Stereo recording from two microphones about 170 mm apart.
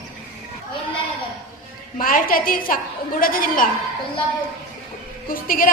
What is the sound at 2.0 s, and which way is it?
Speech, 55° left (ahead or behind).